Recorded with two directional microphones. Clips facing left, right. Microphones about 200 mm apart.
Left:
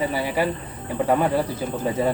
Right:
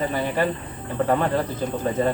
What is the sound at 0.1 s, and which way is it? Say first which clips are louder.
Speech: even; 10° left (ahead or behind).